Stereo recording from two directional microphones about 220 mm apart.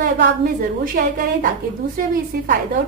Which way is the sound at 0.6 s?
40° right (ahead or behind).